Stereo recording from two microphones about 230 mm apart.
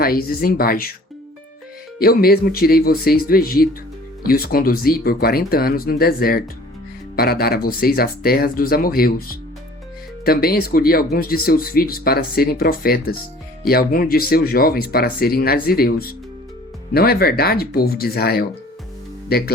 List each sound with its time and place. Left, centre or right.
0.0 s speech: left
2.0 s speech: left
10.2 s speech: left